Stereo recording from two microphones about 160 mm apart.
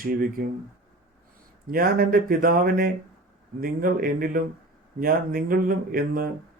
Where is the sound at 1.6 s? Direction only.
65° right (ahead or behind).